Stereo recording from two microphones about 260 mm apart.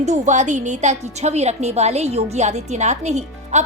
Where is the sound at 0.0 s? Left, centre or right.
Right.